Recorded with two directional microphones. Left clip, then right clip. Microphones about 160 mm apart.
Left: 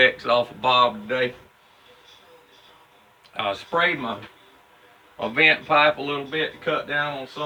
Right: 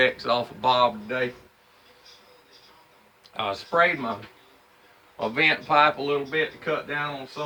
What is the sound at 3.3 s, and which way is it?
Speech, 20° right (ahead or behind).